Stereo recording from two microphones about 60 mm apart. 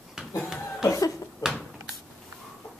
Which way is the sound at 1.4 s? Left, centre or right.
Centre.